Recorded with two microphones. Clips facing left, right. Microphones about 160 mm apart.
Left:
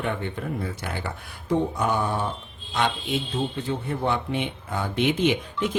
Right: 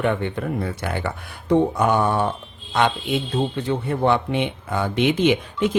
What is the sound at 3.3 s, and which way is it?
Speech, 75° right (ahead or behind).